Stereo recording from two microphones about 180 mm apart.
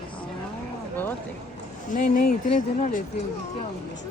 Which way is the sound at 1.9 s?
45° left (ahead or behind).